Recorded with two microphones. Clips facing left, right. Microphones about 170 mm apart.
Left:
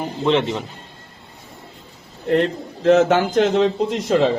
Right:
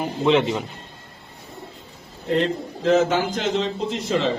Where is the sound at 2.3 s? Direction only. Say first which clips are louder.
Left 3 dB; 60° left (ahead or behind).